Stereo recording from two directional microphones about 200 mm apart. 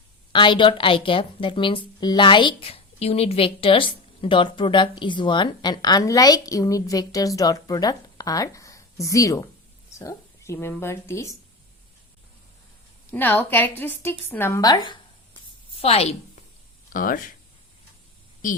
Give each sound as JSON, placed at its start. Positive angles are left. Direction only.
{"t": 0.3, "sound": "a woman's voice", "side_deg": 25}
{"t": 13.1, "sound": "a woman's voice", "side_deg": 10}
{"t": 16.9, "sound": "speech", "side_deg": 45}